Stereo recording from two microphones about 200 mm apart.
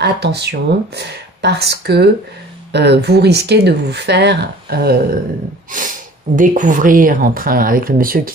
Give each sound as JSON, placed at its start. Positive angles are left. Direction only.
{"t": 0.0, "sound": "speech", "side_deg": -55}
{"t": 6.3, "sound": "speech", "side_deg": -40}